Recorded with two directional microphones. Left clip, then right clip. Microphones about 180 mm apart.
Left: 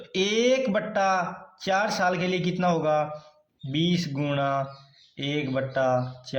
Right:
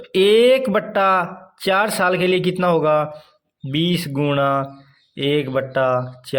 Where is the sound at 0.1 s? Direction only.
45° right (ahead or behind).